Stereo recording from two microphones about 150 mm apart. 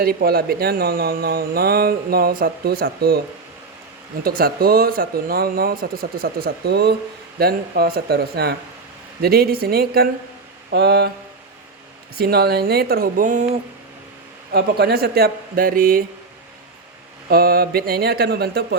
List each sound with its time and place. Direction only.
0.0 s speech: 90° right
4.2 s speech: 80° right
12.1 s speech: 90° right; by 13.5 s 65° right (ahead or behind)
14.5 s speech: 90° right; by 16.0 s 70° right (ahead or behind)
17.2 s speech: 90° right